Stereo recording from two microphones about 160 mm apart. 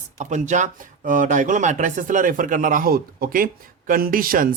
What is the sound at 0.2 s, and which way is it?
Speech, 50° right (ahead or behind).